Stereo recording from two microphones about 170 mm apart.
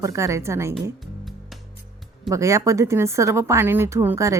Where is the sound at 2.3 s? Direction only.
20° right (ahead or behind).